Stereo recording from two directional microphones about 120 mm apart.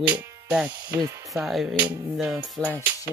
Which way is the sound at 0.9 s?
25° right (ahead or behind).